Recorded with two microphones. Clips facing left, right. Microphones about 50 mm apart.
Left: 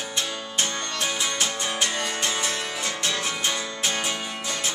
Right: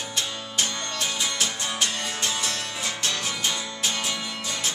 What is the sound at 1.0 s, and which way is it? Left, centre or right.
Music, centre.